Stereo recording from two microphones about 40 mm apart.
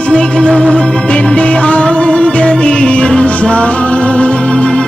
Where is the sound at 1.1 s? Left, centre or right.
Left.